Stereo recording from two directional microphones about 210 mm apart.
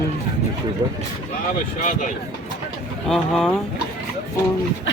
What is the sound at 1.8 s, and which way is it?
Speech, 35° left (ahead or behind).